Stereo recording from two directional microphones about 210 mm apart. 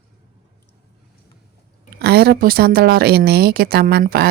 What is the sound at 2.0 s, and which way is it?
Speech, 50° right (ahead or behind).